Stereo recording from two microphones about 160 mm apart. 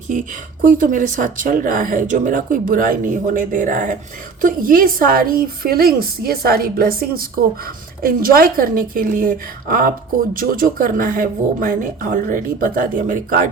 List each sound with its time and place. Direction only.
0.1 s a woman's voice: 55° right (ahead or behind)